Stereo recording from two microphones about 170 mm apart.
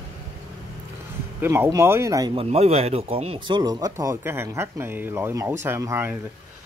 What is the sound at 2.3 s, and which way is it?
Speech, 35° right (ahead or behind).